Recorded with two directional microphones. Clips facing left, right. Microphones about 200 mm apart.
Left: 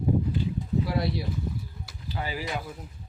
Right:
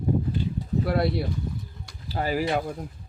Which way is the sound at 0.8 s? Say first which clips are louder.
Right 4 dB; 55° right (ahead or behind).